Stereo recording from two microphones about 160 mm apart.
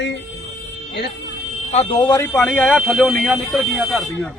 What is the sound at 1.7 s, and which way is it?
Speech, 40° left (ahead or behind).